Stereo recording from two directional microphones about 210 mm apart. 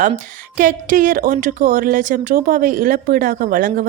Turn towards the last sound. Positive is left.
turn(degrees=-40)  # may be behind; listen again after turning